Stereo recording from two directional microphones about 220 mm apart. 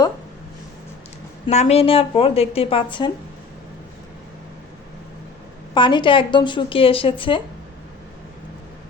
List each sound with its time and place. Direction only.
1.5 s a woman's voice: 30° left (ahead or behind)
5.7 s a woman's voice: 20° left (ahead or behind)